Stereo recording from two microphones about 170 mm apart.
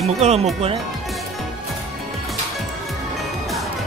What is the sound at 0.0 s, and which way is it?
Speech, 40° right (ahead or behind).